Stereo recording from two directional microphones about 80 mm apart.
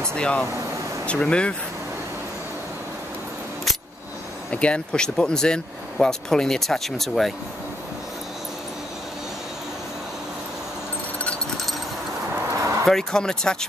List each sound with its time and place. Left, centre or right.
0.1 s speech: centre
4.5 s speech: centre
12.5 s a sound: right
12.8 s speech: centre